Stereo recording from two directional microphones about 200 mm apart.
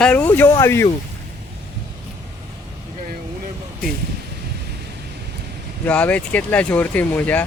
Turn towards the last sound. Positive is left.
turn(degrees=10)  # may be behind; listen again after turning